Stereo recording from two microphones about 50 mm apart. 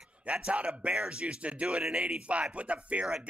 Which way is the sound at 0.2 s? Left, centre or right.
Right.